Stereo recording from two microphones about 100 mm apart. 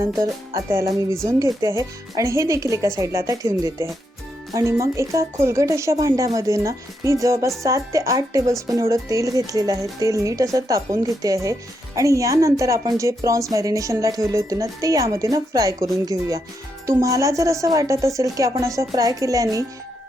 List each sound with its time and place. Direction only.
0.7 s a woman's voice: 25° right (ahead or behind)